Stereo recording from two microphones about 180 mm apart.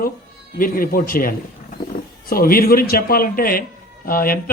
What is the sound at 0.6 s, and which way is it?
A man's voice, 50° left (ahead or behind).